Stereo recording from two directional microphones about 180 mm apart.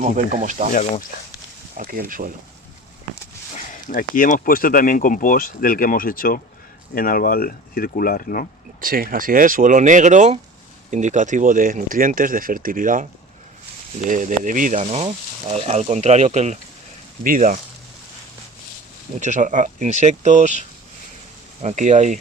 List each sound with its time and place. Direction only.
0.0 s speech: 40° right (ahead or behind)
0.7 s speech: 50° left (ahead or behind)
1.7 s speech: 50° right (ahead or behind)
3.7 s speech: 50° left (ahead or behind)
8.8 s speech: 50° right (ahead or behind)
19.2 s speech: 45° right (ahead or behind)
21.6 s speech: 40° right (ahead or behind)